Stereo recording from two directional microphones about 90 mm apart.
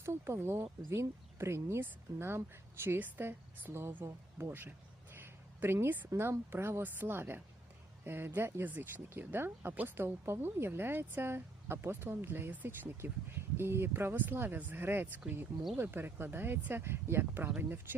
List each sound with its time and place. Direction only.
0.0 s speech: 30° right (ahead or behind)
5.1 s a sound: 25° right (ahead or behind)
6.1 s speech: 30° right (ahead or behind)